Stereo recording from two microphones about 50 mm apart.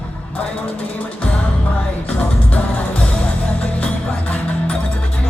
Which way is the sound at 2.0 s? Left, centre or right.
Left.